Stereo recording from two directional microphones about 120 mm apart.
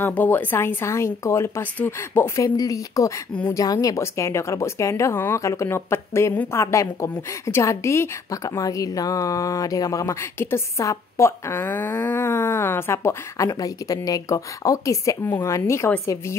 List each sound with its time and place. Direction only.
0.0 s speech: 15° left (ahead or behind)